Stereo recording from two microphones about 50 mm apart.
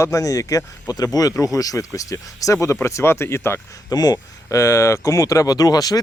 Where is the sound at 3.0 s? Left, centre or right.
Left.